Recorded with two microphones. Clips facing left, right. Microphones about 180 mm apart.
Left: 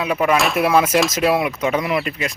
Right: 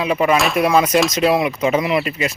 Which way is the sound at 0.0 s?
Centre (ahead or behind).